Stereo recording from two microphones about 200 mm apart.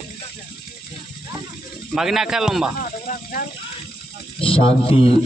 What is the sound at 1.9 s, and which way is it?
Speech, 5° right (ahead or behind).